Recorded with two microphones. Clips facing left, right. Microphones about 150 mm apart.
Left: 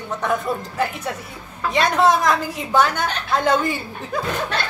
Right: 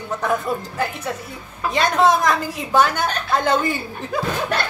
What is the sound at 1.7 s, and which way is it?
A woman's voice, centre (ahead or behind).